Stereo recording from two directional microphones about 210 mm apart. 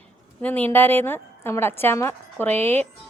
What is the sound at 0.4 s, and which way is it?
A woman's voice, 10° left (ahead or behind).